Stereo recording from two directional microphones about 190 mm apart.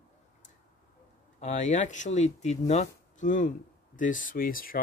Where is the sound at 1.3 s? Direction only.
40° left (ahead or behind).